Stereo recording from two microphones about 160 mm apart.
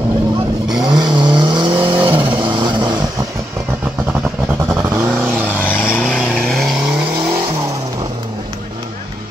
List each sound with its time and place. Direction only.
0.7 s vehicle: 5° right (ahead or behind)
0.9 s vehicle: 25° right (ahead or behind)
4.1 s vehicle: 15° right (ahead or behind)
5.6 s vehicle: 10° left (ahead or behind); by 7.3 s 5° right (ahead or behind)